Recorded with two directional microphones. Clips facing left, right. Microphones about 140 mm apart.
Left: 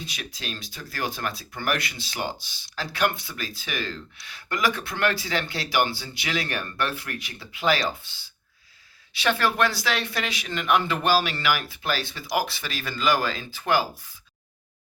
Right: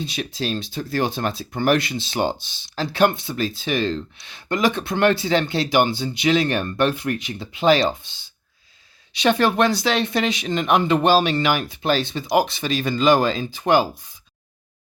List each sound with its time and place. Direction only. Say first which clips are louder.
0.0 s speech: right 10 dB; 25° right (ahead or behind)